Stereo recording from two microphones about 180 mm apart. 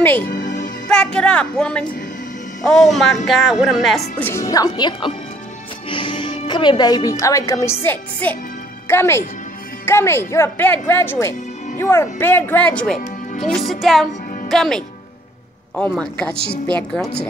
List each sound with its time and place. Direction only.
0.4 s music: 45° left (ahead or behind)
0.8 s speech: 5° left (ahead or behind)
4.2 s a woman's voice: 15° left (ahead or behind)
13.0 s music: 45° left (ahead or behind)
13.5 s speech: centre (ahead or behind)
15.9 s speech: 5° left (ahead or behind)